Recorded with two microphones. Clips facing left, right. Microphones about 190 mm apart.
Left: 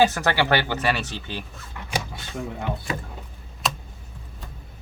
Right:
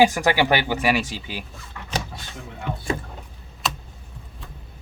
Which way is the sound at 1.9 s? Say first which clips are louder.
Even; 10° left (ahead or behind).